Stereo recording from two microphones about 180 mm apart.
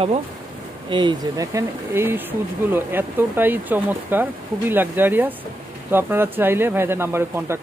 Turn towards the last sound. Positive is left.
turn(degrees=-15)  # may be behind; listen again after turning